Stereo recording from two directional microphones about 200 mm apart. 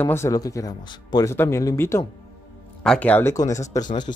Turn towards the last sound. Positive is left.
turn(degrees=15)  # may be behind; listen again after turning